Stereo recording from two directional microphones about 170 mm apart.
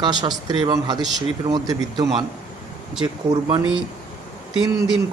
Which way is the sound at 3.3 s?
25° right (ahead or behind).